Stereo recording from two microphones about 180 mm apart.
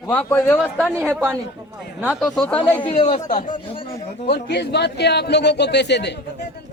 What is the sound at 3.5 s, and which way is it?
Speech, 30° left (ahead or behind).